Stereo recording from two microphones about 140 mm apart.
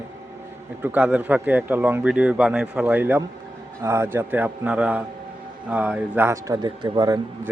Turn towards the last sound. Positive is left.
turn(degrees=-30)  # may be behind; listen again after turning